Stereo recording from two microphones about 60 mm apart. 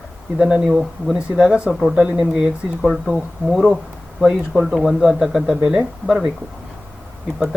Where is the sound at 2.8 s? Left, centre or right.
Centre.